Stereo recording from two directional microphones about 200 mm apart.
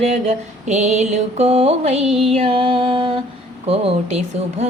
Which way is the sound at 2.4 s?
25° right (ahead or behind).